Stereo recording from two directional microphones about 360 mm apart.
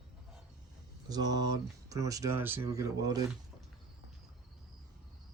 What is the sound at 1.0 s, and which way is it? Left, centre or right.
Speech, centre.